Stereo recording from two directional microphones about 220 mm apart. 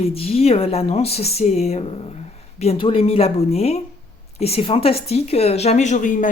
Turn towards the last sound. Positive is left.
turn(degrees=35)  # may be behind; listen again after turning